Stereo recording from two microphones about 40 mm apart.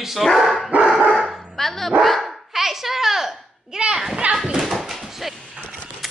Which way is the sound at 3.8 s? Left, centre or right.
Centre.